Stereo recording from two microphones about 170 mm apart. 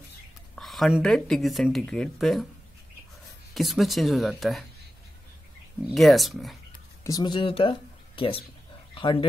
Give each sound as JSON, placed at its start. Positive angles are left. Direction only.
{"t": 0.6, "sound": "speech", "side_deg": 0}
{"t": 3.5, "sound": "speech", "side_deg": 0}
{"t": 5.9, "sound": "speech", "side_deg": 0}
{"t": 7.0, "sound": "speech", "side_deg": 20}